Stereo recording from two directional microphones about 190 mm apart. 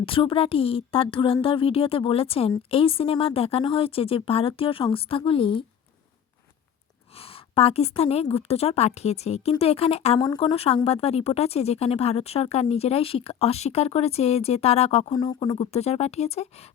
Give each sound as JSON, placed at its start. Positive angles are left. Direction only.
{"t": 0.0, "sound": "speech", "side_deg": 30}
{"t": 7.2, "sound": "speech", "side_deg": 30}